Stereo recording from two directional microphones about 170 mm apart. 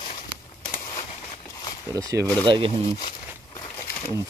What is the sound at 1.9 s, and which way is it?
Speech, 20° right (ahead or behind).